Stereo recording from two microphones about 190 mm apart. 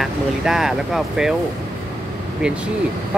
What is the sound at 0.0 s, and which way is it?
Speech, 5° right (ahead or behind).